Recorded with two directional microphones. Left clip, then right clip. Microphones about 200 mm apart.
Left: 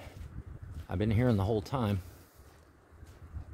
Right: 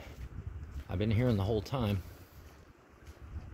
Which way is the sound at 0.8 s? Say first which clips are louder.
Left 2 dB; 25° left (ahead or behind).